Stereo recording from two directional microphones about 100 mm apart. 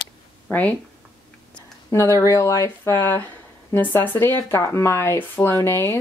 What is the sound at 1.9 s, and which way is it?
Speech, 30° left (ahead or behind).